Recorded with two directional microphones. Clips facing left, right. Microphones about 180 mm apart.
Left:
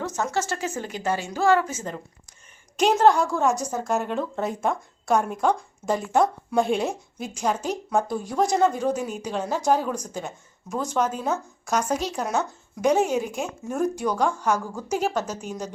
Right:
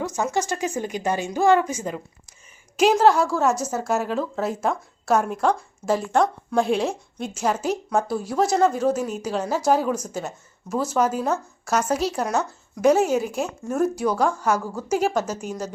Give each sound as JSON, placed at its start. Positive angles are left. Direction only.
{"t": 0.0, "sound": "a woman's voice", "side_deg": -10}